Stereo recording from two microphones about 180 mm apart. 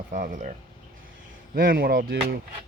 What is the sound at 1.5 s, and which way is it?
Speech, 55° right (ahead or behind).